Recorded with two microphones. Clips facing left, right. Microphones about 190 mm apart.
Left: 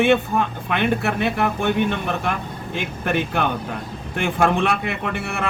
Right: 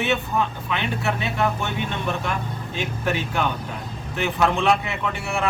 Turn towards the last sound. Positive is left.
turn(degrees=60)  # may be behind; listen again after turning